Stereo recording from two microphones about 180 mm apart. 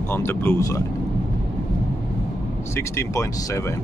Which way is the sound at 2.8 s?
15° left (ahead or behind).